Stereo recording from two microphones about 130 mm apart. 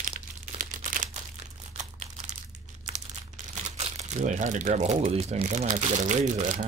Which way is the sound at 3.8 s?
60° right (ahead or behind).